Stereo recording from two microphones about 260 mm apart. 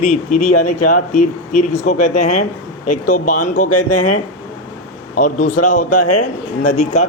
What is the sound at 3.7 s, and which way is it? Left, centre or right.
Speech, left.